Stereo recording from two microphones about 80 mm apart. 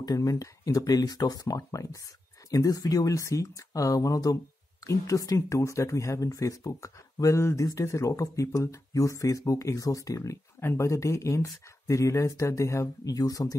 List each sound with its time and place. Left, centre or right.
0.0 s speech: left
13.0 s speech: left